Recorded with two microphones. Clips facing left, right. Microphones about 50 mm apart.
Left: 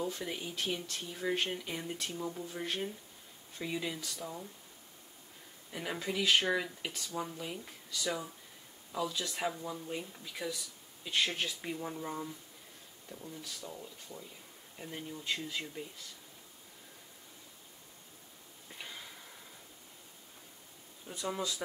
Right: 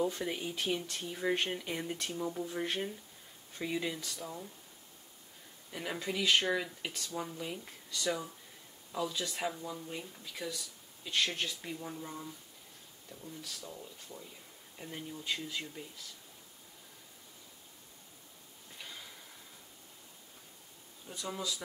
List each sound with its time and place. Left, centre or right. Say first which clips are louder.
0.1 s speech: right 2 dB; centre
5.7 s speech: even; centre
18.8 s a sound: left 1 dB; centre
21.1 s speech: left 3 dB; centre